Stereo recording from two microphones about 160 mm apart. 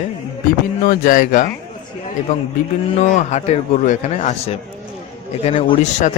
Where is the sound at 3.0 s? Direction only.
45° left (ahead or behind).